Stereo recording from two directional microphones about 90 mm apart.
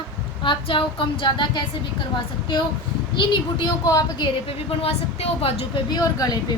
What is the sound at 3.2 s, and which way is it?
Speech, 60° left (ahead or behind).